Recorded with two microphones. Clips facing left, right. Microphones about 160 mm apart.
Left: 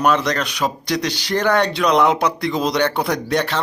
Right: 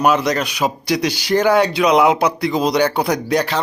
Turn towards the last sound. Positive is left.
turn(degrees=0)  # may be behind; listen again after turning